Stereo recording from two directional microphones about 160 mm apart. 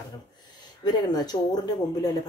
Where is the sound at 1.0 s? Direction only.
25° left (ahead or behind).